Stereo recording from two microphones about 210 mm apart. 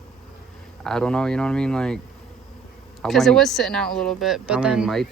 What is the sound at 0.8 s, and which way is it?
Speech, 5° left (ahead or behind).